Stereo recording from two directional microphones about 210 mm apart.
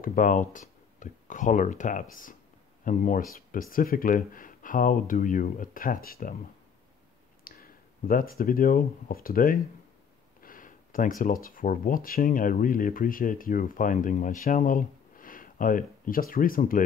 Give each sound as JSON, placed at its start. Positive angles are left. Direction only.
{"t": 0.0, "sound": "speech", "side_deg": 40}
{"t": 7.4, "sound": "speech", "side_deg": 40}